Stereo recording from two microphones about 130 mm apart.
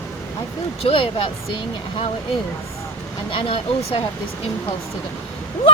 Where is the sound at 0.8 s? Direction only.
45° left (ahead or behind).